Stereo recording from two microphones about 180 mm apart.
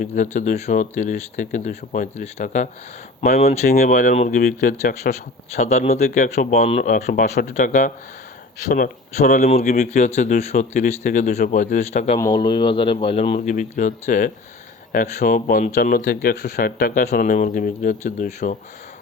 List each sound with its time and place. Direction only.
0.0 s speech: 45° left (ahead or behind)
3.8 s speech: 45° left (ahead or behind)
5.5 s speech: 40° left (ahead or behind)
6.9 s speech: 50° left (ahead or behind)
12.2 s speech: 25° left (ahead or behind)
13.5 s speech: 45° left (ahead or behind)